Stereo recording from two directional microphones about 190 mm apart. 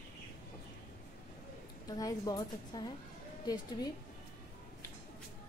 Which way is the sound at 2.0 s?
20° left (ahead or behind).